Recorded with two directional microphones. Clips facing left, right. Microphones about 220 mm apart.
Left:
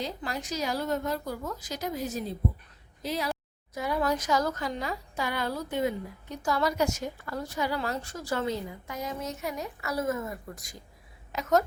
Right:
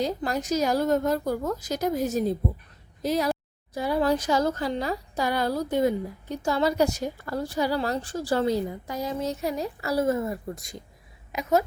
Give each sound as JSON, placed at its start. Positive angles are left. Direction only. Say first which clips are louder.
{"t": 0.0, "sound": "a woman's voice", "louder": "right 7 dB", "side_deg": -45}
{"t": 3.8, "sound": "a woman's voice", "louder": "right 5 dB", "side_deg": -30}
{"t": 11.3, "sound": "a woman's voice", "louder": "right 2 dB", "side_deg": -10}